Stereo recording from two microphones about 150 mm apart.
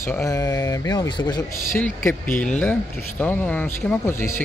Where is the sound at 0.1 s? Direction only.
20° left (ahead or behind).